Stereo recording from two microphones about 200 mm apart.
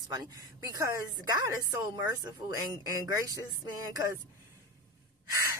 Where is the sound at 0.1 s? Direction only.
20° right (ahead or behind).